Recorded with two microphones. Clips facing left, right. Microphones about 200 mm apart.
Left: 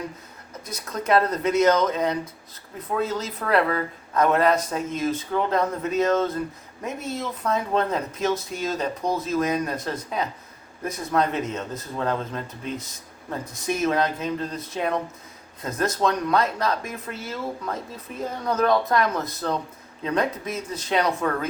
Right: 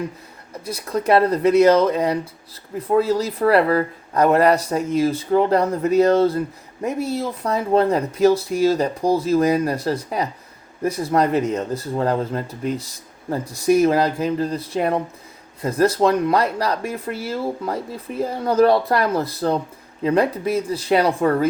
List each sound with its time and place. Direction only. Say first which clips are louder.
0.5 s speech: right 8 dB; 30° right (ahead or behind)
13.8 s speech: right 5 dB; 35° right (ahead or behind)